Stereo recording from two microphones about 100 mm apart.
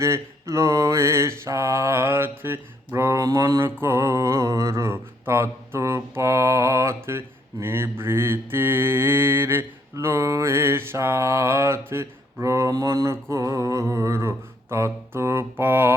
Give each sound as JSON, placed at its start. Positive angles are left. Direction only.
{"t": 0.0, "sound": "mantra", "side_deg": -30}